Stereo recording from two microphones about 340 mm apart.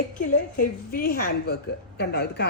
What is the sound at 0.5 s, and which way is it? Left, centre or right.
A woman's voice, left.